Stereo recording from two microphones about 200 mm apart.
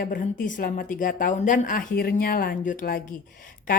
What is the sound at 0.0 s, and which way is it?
A woman's voice, 45° left (ahead or behind).